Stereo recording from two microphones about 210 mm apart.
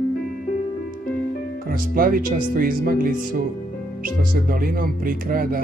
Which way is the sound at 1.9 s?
45° right (ahead or behind).